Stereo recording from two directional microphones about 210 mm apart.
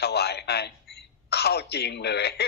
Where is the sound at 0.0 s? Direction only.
50° left (ahead or behind).